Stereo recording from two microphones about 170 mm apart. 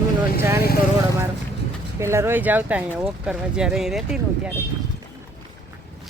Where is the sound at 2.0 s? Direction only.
15° right (ahead or behind).